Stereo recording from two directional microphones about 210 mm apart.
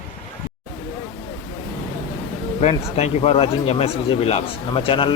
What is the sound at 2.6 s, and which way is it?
Speech, 30° left (ahead or behind).